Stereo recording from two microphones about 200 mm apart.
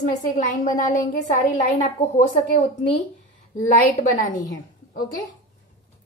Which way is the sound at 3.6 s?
35° left (ahead or behind).